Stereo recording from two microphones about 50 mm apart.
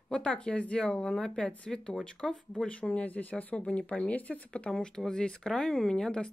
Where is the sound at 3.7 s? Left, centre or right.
Left.